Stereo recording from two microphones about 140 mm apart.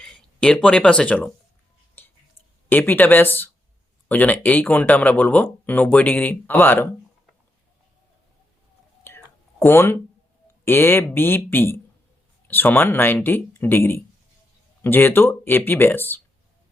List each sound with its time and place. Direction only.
0.0 s speech: 5° left (ahead or behind)
2.0 s whispering: 15° left (ahead or behind)
2.6 s speech: 15° left (ahead or behind)
9.0 s whispering: 20° left (ahead or behind)
10.7 s speech: 15° left (ahead or behind)